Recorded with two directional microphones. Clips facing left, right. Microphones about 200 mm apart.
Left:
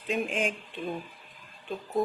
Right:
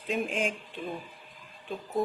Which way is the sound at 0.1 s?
Centre (ahead or behind).